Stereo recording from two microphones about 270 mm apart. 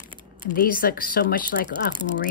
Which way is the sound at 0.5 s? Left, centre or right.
Left.